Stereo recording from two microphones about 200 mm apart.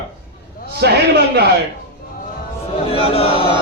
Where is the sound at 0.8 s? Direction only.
55° right (ahead or behind).